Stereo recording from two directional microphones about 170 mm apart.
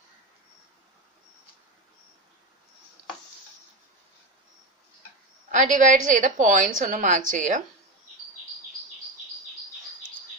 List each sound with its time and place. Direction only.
5.5 s a woman's voice: 50° right (ahead or behind)